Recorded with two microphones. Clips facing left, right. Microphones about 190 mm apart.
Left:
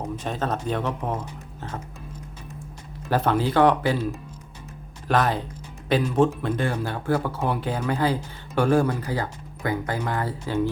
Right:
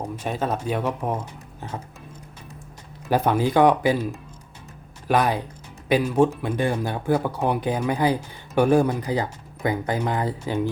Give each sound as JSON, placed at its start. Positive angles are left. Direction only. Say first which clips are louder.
{"t": 0.0, "sound": "speech", "louder": "right 1 dB", "side_deg": -10}
{"t": 3.1, "sound": "speech", "louder": "right 2 dB", "side_deg": -10}
{"t": 5.0, "sound": "speech", "louder": "right 1 dB", "side_deg": -15}